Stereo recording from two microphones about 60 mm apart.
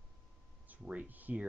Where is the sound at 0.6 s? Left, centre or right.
Right.